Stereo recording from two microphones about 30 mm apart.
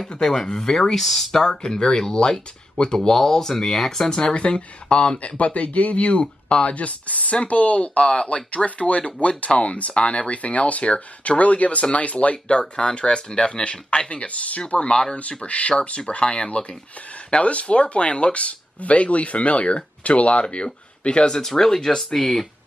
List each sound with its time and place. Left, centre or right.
0.2 s speech: centre
1.0 s speech: centre
1.3 s speech: left
3.1 s speech: centre
4.1 s speech: left
4.4 s speech: left
5.4 s speech: left
21.4 s speech: centre